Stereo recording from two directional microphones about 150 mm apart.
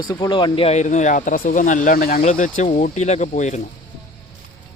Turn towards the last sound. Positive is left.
turn(degrees=55)  # may be behind; listen again after turning